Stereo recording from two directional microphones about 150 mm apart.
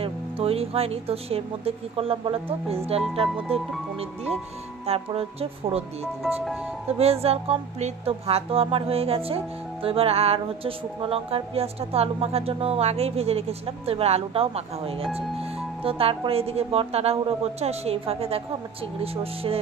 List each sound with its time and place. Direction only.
0.0 s speech: 40° right (ahead or behind)
4.8 s speech: 40° right (ahead or behind)
7.0 s speech: 40° right (ahead or behind)